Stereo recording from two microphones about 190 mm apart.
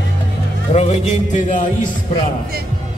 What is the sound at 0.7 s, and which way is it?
Music, 40° left (ahead or behind).